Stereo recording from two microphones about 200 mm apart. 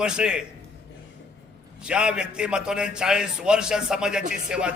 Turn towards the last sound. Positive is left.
turn(degrees=-5)  # may be behind; listen again after turning